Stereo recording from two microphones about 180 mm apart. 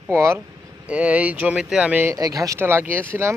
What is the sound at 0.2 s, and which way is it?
Speech, 15° right (ahead or behind).